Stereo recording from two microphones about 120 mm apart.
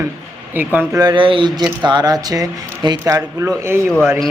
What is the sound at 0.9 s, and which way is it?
Speech, 35° right (ahead or behind).